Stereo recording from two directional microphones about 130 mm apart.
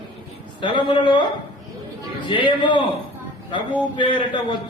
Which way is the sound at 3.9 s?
40° left (ahead or behind).